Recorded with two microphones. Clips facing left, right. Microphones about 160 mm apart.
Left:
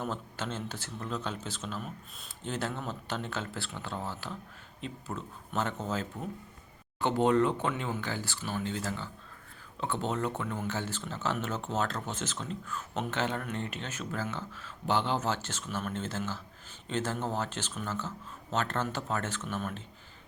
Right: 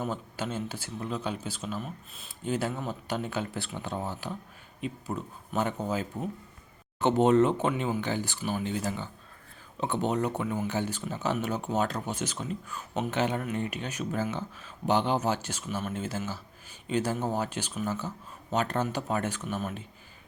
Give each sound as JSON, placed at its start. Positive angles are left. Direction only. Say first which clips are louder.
{"t": 0.0, "sound": "speech", "louder": "right 3 dB", "side_deg": -10}